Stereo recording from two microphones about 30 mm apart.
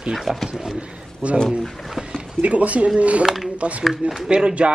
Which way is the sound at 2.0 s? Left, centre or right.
Right.